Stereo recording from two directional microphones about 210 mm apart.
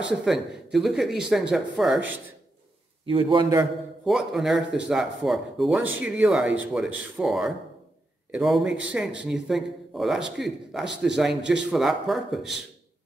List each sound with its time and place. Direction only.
0.2 s speech: centre (ahead or behind)
3.1 s a man's voice: 25° right (ahead or behind)
4.0 s speech: centre (ahead or behind)